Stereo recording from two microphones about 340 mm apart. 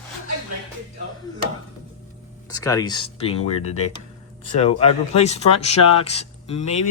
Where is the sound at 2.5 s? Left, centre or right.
Centre.